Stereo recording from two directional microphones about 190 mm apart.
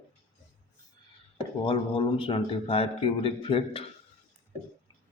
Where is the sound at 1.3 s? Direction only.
25° left (ahead or behind).